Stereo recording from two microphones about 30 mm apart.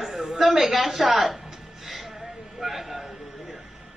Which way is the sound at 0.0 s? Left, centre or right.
Centre.